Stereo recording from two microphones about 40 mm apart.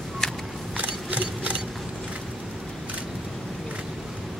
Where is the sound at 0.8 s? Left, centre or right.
Right.